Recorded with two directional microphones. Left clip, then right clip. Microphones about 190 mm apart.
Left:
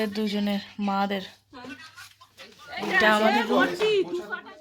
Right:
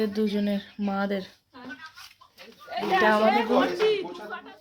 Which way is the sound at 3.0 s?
Centre (ahead or behind).